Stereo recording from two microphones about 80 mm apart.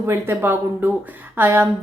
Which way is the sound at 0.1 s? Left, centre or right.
Right.